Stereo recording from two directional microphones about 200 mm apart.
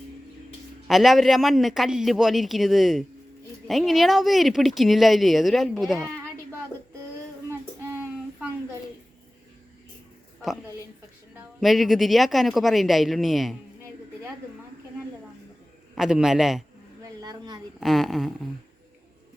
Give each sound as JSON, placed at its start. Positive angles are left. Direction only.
{"t": 0.9, "sound": "speech", "side_deg": 0}
{"t": 11.6, "sound": "speech", "side_deg": 0}
{"t": 16.0, "sound": "speech", "side_deg": -5}
{"t": 17.0, "sound": "a sound", "side_deg": -20}
{"t": 17.7, "sound": "speech", "side_deg": 0}